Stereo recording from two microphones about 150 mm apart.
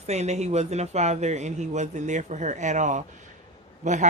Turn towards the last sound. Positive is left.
turn(degrees=-55)  # may be behind; listen again after turning